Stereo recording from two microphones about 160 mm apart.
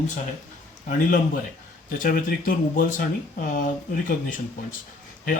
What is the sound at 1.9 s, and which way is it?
Speech, 60° left (ahead or behind).